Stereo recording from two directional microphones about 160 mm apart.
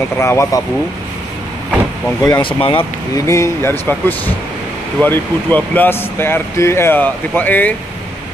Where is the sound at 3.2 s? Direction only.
20° left (ahead or behind).